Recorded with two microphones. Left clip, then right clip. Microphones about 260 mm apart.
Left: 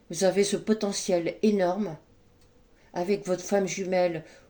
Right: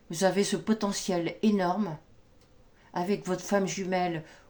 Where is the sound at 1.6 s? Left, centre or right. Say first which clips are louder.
Left 3 dB; right.